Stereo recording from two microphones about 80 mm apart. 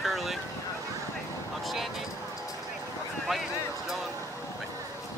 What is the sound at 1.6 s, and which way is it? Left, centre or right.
Speech, centre.